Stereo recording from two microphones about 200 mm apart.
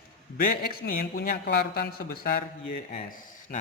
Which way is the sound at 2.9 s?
35° left (ahead or behind).